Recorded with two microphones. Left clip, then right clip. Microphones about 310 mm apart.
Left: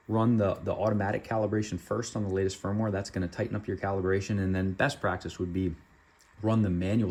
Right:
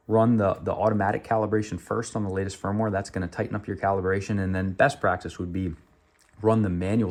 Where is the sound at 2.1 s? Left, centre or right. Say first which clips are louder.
Right 1 dB; right.